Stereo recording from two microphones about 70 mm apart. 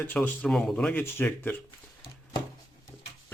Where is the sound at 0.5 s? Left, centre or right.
Centre.